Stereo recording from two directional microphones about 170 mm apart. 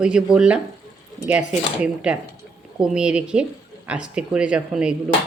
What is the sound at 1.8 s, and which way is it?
Speech, 5° right (ahead or behind).